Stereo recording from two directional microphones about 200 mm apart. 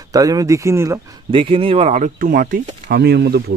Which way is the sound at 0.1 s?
20° right (ahead or behind).